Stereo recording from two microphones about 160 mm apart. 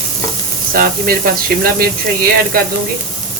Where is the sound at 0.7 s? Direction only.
70° right (ahead or behind).